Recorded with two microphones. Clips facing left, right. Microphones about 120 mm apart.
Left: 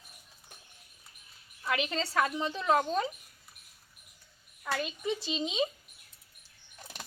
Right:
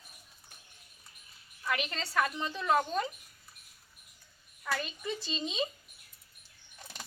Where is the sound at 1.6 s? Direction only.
20° left (ahead or behind).